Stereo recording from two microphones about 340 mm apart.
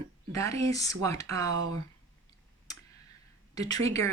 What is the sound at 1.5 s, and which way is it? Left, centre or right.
Speech, right.